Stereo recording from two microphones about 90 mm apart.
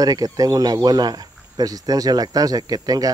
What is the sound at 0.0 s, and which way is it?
Speech, 40° right (ahead or behind).